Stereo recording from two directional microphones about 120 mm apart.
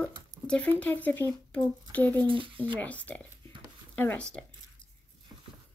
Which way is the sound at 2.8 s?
15° left (ahead or behind).